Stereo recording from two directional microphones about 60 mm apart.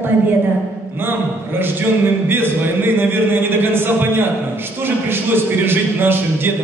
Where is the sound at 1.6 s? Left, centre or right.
Right.